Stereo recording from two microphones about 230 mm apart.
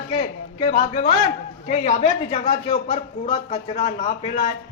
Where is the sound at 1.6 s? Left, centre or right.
Left.